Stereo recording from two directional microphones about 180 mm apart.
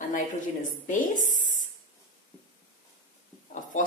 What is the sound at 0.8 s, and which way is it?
Speech, 45° left (ahead or behind).